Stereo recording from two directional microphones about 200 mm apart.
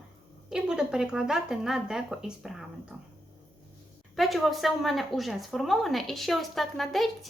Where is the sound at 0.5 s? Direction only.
5° right (ahead or behind).